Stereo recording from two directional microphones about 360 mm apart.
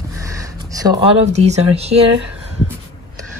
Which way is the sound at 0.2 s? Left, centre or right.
Centre.